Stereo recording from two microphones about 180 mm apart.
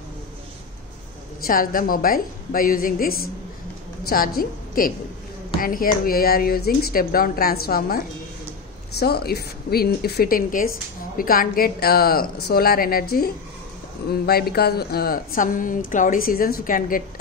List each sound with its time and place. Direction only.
1.5 s a woman's voice: 50° left (ahead or behind)